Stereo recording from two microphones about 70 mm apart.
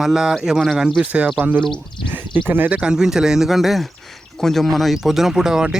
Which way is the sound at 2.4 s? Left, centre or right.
Right.